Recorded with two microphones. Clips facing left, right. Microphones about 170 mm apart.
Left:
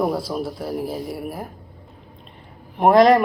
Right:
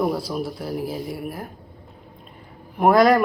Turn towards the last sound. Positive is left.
turn(degrees=25)  # may be behind; listen again after turning